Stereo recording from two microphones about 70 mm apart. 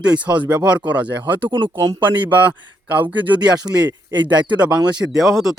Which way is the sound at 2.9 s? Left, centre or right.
Right.